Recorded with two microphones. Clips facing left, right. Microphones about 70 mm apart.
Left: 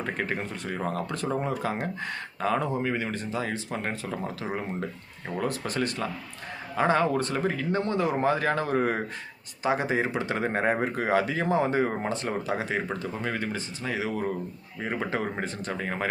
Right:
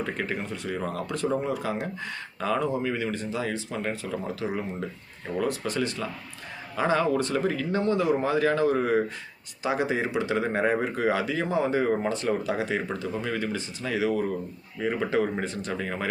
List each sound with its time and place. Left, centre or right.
0.0 s speech: left